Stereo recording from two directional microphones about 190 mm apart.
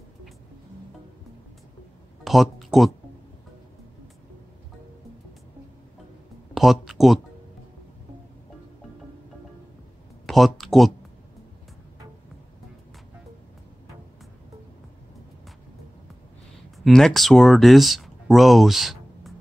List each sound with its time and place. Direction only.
2.2 s speech: centre (ahead or behind)
6.5 s speech: centre (ahead or behind)
10.2 s speech: centre (ahead or behind)
16.8 s speech: centre (ahead or behind)